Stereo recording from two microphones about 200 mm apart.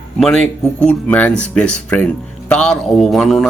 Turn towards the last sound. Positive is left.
turn(degrees=0)  # may be behind; listen again after turning